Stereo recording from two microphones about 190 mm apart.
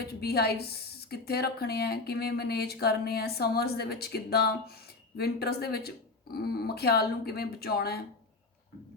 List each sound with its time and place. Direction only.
0.0 s a woman's voice: 55° left (ahead or behind)